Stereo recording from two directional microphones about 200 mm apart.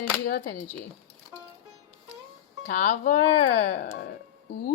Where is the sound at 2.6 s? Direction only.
40° left (ahead or behind).